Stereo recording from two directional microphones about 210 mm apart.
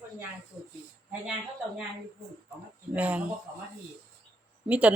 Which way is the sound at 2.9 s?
5° right (ahead or behind).